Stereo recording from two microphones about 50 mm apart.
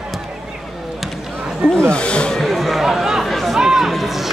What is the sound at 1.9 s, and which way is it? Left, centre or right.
Speech, left.